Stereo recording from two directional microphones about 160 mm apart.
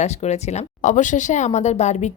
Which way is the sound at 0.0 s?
45° left (ahead or behind).